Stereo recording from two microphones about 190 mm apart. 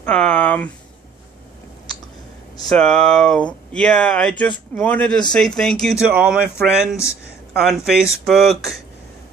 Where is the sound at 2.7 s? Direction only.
5° left (ahead or behind).